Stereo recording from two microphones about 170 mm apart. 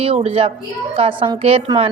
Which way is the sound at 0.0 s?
35° right (ahead or behind).